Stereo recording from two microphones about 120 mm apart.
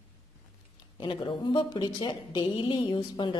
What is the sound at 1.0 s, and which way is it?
A woman's voice, 40° left (ahead or behind).